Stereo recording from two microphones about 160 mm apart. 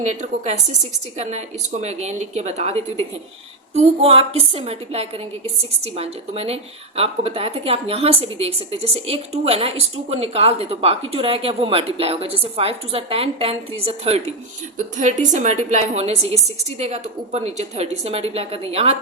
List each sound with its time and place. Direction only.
0.0 s a woman's voice: 50° right (ahead or behind)